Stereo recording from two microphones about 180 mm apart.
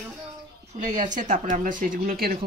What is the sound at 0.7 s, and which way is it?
Speech, 40° right (ahead or behind).